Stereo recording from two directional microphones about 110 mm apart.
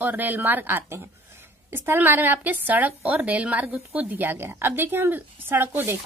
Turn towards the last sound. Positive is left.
turn(degrees=-20)  # may be behind; listen again after turning